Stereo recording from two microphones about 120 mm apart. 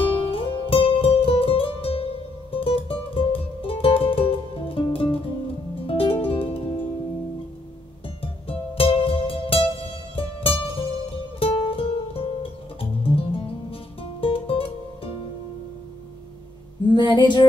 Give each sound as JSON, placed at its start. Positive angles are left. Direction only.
{"t": 0.0, "sound": "music", "side_deg": 50}
{"t": 8.2, "sound": "music", "side_deg": 50}
{"t": 16.9, "sound": "female singing", "side_deg": 40}